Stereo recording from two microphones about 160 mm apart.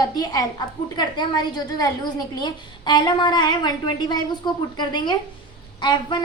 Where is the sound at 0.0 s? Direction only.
25° left (ahead or behind).